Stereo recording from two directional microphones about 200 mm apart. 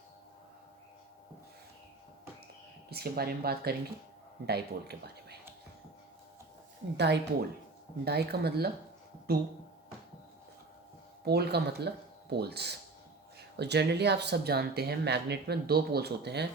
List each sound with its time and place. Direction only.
2.9 s speech: 50° right (ahead or behind)
6.9 s speech: 55° right (ahead or behind)
11.3 s speech: 55° right (ahead or behind)